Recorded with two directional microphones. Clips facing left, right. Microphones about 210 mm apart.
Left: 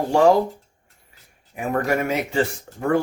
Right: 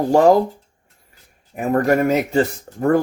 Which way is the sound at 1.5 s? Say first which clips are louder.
Right 5 dB; 40° right (ahead or behind).